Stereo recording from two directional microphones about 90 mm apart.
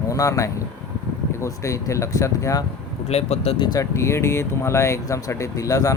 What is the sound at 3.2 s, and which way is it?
Speech, 90° left.